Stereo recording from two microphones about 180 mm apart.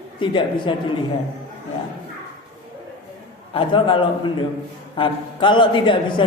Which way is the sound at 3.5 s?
30° left (ahead or behind).